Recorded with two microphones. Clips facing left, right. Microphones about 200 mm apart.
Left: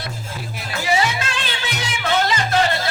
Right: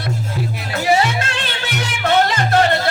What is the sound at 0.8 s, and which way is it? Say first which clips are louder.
Music: right 4 dB; 55° right (ahead or behind).